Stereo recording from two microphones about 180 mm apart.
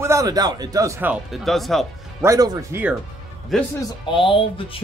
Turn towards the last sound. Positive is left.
turn(degrees=30)  # may be behind; listen again after turning